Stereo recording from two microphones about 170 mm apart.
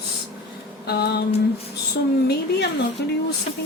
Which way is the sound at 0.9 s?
70° left (ahead or behind).